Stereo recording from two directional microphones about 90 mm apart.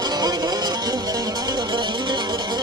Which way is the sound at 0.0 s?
50° right (ahead or behind).